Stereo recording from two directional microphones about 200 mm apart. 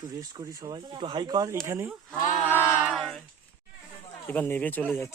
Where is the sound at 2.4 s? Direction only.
10° left (ahead or behind).